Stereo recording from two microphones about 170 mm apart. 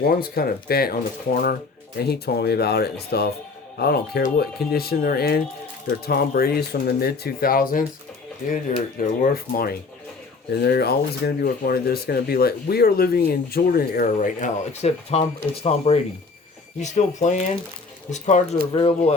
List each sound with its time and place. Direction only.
0.0 s speech: 65° left (ahead or behind); by 18.4 s 45° left (ahead or behind)
18.7 s speech: 30° left (ahead or behind)